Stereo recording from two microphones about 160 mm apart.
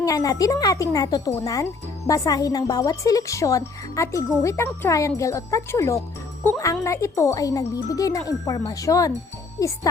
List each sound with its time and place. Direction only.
0.0 s a child's voice: 20° left (ahead or behind)